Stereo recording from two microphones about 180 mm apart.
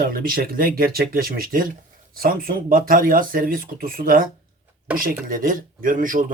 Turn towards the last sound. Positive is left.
turn(degrees=-50)  # may be behind; listen again after turning